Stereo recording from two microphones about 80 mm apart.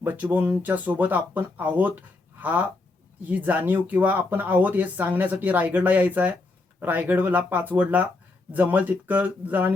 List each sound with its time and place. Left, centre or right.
0.0 s speech: right